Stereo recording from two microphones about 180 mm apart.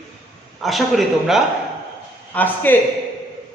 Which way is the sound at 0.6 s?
Centre (ahead or behind).